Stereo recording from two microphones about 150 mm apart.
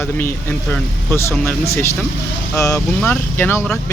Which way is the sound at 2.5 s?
20° left (ahead or behind).